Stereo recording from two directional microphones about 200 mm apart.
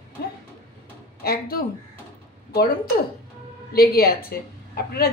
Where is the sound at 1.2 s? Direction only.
50° left (ahead or behind).